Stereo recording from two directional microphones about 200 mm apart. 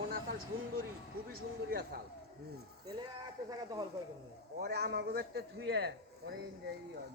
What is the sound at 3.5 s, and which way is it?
Speech, 20° right (ahead or behind).